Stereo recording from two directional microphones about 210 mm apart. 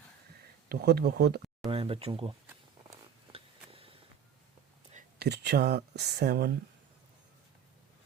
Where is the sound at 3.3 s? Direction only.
25° right (ahead or behind).